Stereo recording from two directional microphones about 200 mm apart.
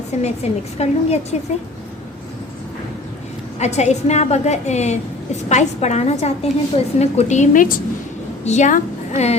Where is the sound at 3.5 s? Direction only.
35° left (ahead or behind).